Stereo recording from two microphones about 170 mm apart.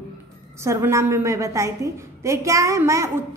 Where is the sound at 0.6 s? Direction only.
15° right (ahead or behind).